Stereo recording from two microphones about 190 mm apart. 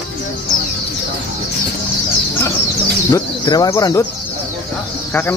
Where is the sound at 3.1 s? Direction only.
20° left (ahead or behind).